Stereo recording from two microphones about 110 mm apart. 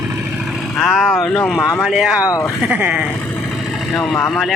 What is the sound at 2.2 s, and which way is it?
Speech, 30° left (ahead or behind).